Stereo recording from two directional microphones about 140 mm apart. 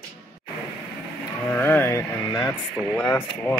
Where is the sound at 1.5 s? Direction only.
15° left (ahead or behind).